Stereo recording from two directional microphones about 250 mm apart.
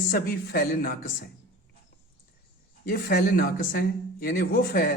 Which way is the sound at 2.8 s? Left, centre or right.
Left.